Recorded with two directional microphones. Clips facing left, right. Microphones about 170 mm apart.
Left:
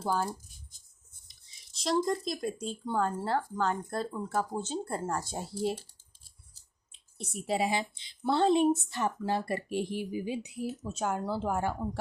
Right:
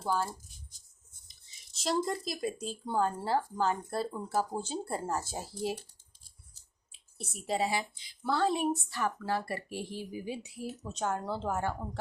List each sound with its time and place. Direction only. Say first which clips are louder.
0.0 s speech: left 1 dB; 15° left (ahead or behind)
1.8 s speech: left 3 dB; 5° right (ahead or behind)
6.9 s a sound: left 5 dB; 5° right (ahead or behind)
7.6 s speech: left 2 dB; 25° left (ahead or behind)
10.9 s speech: even; 10° left (ahead or behind)